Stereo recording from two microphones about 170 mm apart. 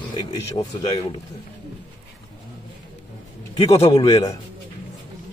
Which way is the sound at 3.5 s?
35° left (ahead or behind).